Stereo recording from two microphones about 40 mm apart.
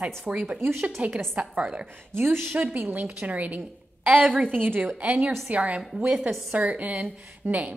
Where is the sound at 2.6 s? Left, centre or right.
Right.